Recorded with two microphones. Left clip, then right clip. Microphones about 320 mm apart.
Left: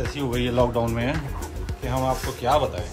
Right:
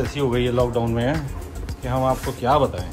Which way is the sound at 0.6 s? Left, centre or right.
Left.